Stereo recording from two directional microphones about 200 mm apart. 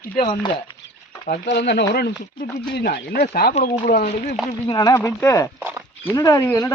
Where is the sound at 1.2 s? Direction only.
55° left (ahead or behind).